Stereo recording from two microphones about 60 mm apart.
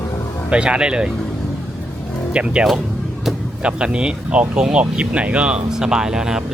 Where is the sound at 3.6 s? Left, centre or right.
Centre.